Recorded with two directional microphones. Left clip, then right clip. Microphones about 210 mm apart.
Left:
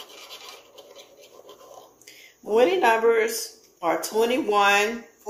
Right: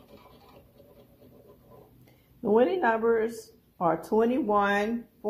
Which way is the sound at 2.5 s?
20° right (ahead or behind).